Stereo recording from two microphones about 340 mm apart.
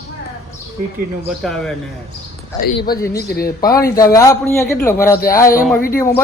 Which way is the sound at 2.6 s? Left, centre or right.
Left.